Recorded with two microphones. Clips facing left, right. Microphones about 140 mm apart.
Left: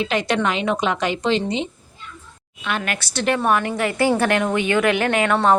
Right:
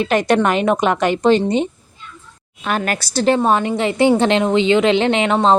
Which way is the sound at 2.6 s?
40° right (ahead or behind).